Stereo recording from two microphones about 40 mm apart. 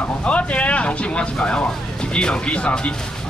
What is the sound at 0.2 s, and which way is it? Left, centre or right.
Speech, left.